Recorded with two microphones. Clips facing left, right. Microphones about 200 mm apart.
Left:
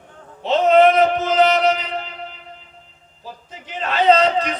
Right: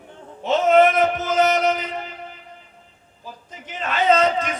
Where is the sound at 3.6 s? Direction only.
50° right (ahead or behind).